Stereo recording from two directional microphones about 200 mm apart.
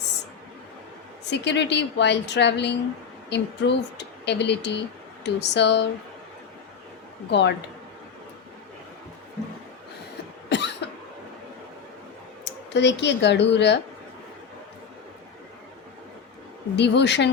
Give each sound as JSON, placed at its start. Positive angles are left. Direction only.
{"t": 1.3, "sound": "speech", "side_deg": 60}
{"t": 7.3, "sound": "speech", "side_deg": 60}
{"t": 10.5, "sound": "cough", "side_deg": 60}
{"t": 12.7, "sound": "speech", "side_deg": 60}
{"t": 16.7, "sound": "speech", "side_deg": 60}